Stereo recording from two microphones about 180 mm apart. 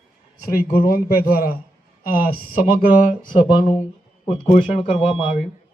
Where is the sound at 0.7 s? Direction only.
55° left (ahead or behind).